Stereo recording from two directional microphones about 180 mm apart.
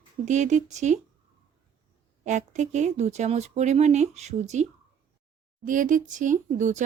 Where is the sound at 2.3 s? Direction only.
40° right (ahead or behind).